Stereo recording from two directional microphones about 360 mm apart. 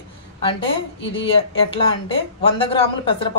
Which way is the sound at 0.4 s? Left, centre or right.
Centre.